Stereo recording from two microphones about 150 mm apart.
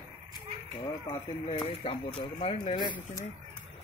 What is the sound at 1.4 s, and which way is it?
Speech, 35° left (ahead or behind).